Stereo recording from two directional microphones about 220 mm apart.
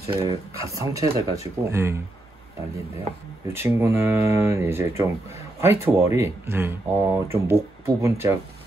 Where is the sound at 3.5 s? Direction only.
10° right (ahead or behind).